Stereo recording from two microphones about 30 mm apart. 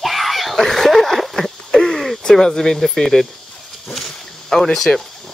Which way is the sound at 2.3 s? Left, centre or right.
Centre.